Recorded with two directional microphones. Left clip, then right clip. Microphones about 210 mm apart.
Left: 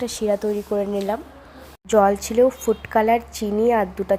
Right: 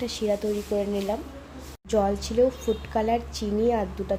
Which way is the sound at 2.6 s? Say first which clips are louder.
Left 7 dB; 15° left (ahead or behind).